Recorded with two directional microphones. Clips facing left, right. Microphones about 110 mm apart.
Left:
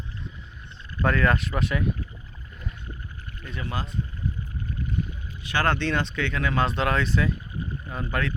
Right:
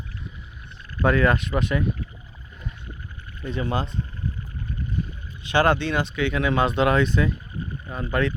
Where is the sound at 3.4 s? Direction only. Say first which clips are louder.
Right 7 dB; 25° right (ahead or behind).